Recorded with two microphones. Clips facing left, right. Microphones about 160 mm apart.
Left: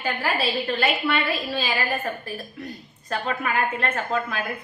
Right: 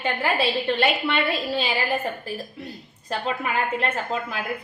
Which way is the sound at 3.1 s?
25° right (ahead or behind).